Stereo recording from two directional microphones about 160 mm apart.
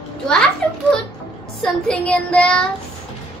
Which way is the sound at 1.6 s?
5° left (ahead or behind).